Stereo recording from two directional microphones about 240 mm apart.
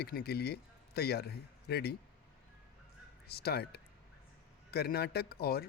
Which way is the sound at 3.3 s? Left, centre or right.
Left.